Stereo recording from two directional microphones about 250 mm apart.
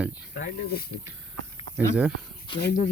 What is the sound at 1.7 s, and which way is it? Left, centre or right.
Speech, centre.